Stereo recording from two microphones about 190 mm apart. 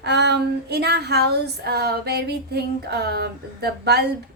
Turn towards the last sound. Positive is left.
turn(degrees=-55)  # may be behind; listen again after turning